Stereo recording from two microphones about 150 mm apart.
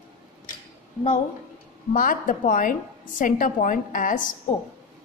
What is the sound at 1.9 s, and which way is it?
A woman's voice, 65° left (ahead or behind).